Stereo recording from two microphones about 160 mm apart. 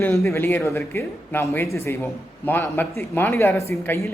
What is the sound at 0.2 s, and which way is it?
Speech, 15° left (ahead or behind).